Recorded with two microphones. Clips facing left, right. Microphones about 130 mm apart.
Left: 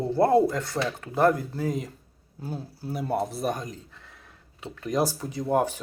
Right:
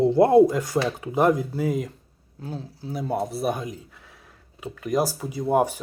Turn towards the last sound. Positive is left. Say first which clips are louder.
# right 3 dB
turn(degrees=-15)  # may be behind; listen again after turning